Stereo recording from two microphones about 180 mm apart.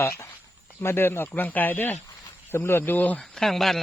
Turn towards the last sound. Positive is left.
turn(degrees=0)  # may be behind; listen again after turning